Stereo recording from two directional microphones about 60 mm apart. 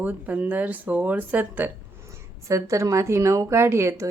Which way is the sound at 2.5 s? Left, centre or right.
Right.